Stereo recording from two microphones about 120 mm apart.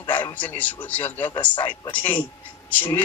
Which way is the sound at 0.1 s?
15° left (ahead or behind).